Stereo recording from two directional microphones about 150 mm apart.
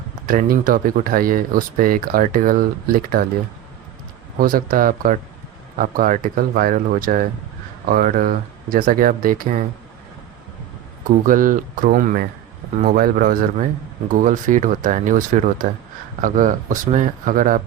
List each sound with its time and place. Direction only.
0.3 s speech: 70° right (ahead or behind)
4.4 s speech: 70° right (ahead or behind)
11.3 s speech: 65° right (ahead or behind)